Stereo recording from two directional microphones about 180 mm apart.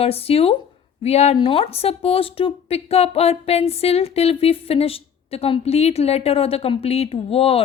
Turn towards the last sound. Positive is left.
turn(degrees=30)  # may be behind; listen again after turning